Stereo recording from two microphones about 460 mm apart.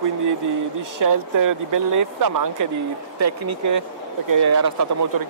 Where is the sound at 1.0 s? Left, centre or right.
Right.